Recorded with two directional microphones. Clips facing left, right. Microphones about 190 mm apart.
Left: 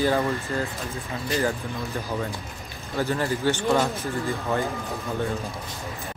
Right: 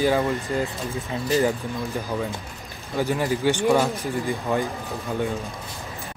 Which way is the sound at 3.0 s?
15° right (ahead or behind).